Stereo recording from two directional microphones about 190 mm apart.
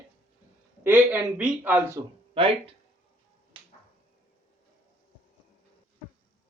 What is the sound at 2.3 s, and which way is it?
Speech, 30° right (ahead or behind).